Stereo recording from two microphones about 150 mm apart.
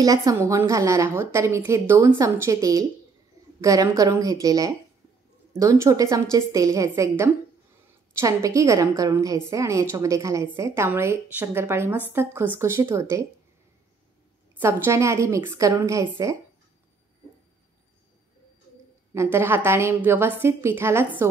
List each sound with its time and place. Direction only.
0.0 s a woman's voice: 20° right (ahead or behind)
14.6 s a woman's voice: 20° right (ahead or behind)
19.3 s a woman's voice: 15° right (ahead or behind)